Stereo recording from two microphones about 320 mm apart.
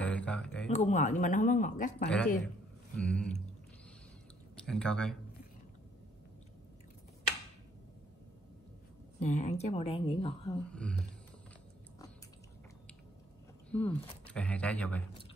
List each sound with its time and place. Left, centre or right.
0.0 s a sound: centre
0.7 s speech: left
2.0 s speech: centre
4.6 s speech: centre
9.2 s speech: left
10.7 s speech: centre
13.7 s speech: centre